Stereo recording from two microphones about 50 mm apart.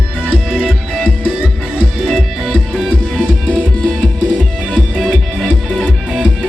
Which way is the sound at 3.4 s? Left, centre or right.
Right.